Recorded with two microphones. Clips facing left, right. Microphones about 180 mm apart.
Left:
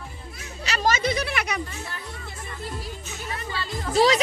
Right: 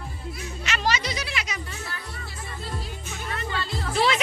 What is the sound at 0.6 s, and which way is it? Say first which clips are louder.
Children playing: left 4 dB; 40° left (ahead or behind).